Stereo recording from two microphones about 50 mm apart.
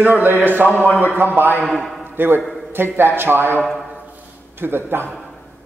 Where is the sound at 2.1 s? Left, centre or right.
Right.